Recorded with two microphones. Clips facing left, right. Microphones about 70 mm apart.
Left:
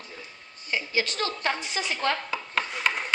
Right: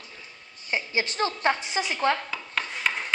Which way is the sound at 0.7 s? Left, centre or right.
Right.